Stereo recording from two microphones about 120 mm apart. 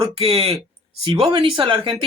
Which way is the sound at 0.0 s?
55° right (ahead or behind).